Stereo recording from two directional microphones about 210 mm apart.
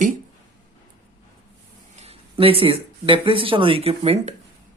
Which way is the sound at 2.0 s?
30° right (ahead or behind).